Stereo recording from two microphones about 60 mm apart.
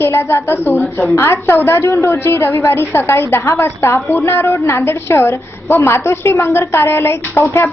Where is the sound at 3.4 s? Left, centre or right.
Left.